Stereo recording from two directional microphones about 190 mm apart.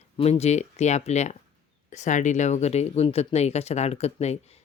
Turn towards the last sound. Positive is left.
turn(degrees=35)  # may be behind; listen again after turning